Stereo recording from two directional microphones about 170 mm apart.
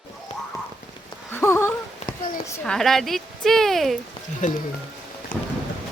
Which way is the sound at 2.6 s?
Centre (ahead or behind).